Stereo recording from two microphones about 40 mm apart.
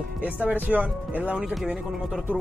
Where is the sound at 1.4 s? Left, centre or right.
Centre.